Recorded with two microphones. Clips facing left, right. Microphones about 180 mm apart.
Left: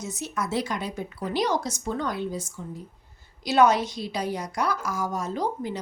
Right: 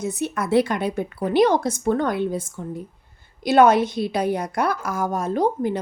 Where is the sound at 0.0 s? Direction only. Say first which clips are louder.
Right 6 dB; 60° right (ahead or behind).